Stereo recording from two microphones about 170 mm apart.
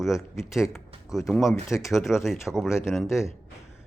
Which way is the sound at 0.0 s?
Centre (ahead or behind).